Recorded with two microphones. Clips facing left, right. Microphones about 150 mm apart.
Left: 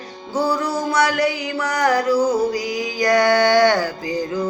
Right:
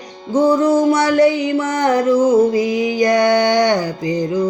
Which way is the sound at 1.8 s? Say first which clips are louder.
Right 4 dB; 25° right (ahead or behind).